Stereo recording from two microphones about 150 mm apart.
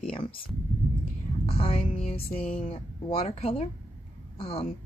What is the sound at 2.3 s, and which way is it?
Speech, 40° left (ahead or behind).